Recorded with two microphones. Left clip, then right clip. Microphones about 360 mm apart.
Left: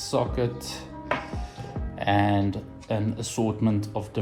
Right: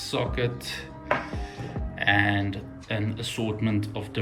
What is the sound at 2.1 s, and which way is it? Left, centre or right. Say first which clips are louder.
Speech: even; centre.